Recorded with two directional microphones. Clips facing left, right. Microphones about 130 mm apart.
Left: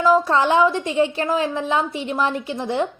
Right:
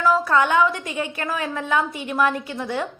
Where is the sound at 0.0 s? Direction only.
25° left (ahead or behind).